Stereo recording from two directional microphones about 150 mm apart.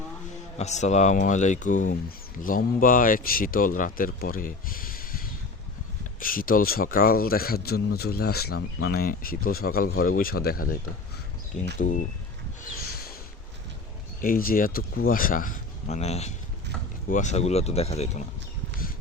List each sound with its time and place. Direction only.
0.6 s speech: 50° left (ahead or behind); by 10.8 s 80° left
11.8 s speech: 60° left (ahead or behind)
14.2 s speech: 70° left (ahead or behind)
15.9 s speech: 45° left (ahead or behind)